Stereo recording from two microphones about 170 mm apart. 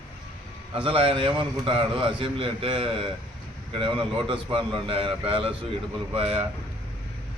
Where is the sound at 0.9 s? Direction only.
30° right (ahead or behind).